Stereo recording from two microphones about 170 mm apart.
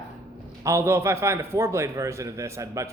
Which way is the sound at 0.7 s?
15° right (ahead or behind).